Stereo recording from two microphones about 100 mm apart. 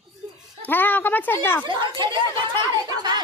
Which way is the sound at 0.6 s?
20° left (ahead or behind).